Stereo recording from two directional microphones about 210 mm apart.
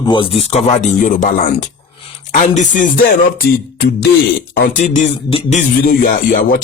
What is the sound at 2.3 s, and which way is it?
Speech, 35° left (ahead or behind).